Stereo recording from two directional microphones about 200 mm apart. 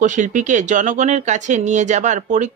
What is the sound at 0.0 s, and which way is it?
Speech, 40° right (ahead or behind).